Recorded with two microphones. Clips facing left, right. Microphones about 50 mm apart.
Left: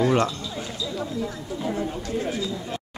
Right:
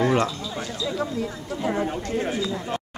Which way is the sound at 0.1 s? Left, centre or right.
Centre.